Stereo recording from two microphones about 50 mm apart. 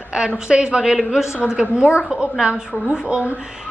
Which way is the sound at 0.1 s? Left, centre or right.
Centre.